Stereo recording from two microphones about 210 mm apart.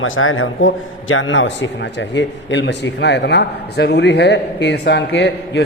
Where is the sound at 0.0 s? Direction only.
70° left (ahead or behind).